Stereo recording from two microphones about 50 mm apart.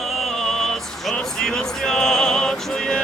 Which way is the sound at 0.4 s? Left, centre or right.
Centre.